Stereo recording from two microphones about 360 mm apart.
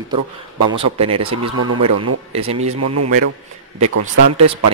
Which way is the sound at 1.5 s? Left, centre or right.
Right.